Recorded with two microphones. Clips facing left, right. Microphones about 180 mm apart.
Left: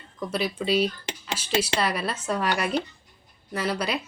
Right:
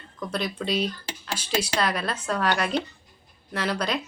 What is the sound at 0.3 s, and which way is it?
Speech, 5° left (ahead or behind).